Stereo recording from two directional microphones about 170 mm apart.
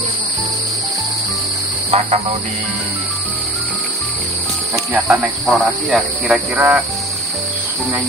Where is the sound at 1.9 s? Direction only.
40° right (ahead or behind).